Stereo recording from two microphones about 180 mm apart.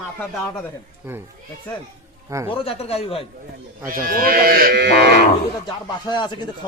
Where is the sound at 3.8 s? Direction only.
50° right (ahead or behind); by 5.1 s 70° right (ahead or behind).